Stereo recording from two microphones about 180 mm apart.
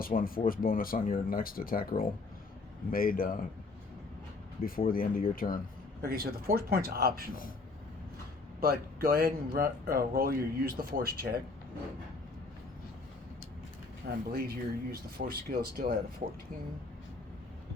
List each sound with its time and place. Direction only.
0.0 s speech: 50° left (ahead or behind)
4.9 s speech: 55° left (ahead or behind)
6.0 s speech: 55° right (ahead or behind)
8.6 s speech: 55° right (ahead or behind)
14.3 s speech: 60° right (ahead or behind)